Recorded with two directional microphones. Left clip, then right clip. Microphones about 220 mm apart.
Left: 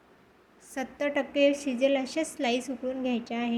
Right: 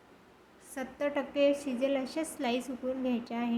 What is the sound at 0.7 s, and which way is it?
A woman's voice, 15° left (ahead or behind).